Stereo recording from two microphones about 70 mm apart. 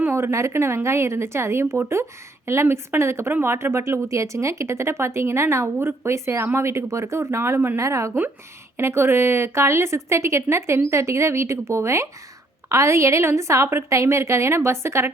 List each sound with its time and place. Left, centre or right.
0.1 s a woman's voice: right